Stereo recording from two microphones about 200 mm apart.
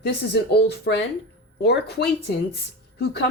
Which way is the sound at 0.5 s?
55° left (ahead or behind).